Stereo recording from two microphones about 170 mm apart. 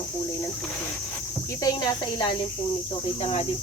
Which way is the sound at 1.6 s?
25° left (ahead or behind).